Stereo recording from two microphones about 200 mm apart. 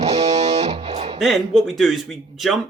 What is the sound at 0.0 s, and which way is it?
Music, 35° right (ahead or behind).